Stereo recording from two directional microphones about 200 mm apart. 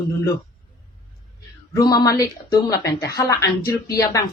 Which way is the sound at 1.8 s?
20° left (ahead or behind).